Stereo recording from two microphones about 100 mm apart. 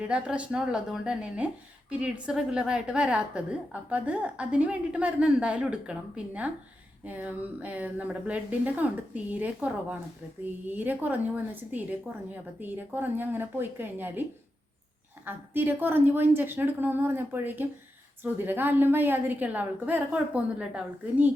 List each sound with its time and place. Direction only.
0.0 s a woman's voice: 10° right (ahead or behind)